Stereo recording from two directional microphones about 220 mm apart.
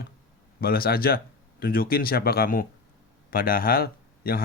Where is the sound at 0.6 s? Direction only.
45° left (ahead or behind).